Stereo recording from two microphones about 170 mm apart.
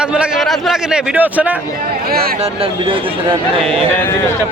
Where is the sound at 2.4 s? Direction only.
30° right (ahead or behind).